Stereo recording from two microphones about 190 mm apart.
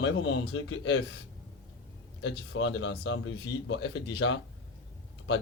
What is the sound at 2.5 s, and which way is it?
Speech, 70° left (ahead or behind).